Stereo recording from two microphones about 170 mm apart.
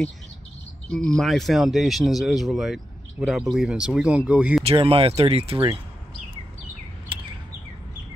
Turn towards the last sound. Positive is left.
turn(degrees=-30)  # may be behind; listen again after turning